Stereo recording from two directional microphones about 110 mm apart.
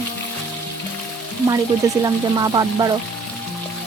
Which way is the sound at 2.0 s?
35° right (ahead or behind).